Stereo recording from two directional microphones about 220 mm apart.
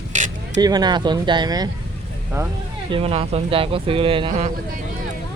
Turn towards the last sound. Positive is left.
turn(degrees=-25)  # may be behind; listen again after turning